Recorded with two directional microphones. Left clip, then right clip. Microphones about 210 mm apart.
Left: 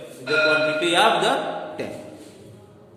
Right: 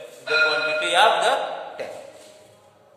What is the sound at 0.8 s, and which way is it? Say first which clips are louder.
A man's voice: right 4 dB; 10° right (ahead or behind).